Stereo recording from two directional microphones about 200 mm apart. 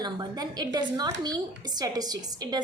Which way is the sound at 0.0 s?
20° right (ahead or behind).